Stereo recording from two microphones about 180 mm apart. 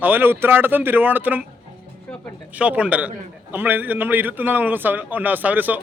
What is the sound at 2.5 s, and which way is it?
A man's voice, 5° right (ahead or behind).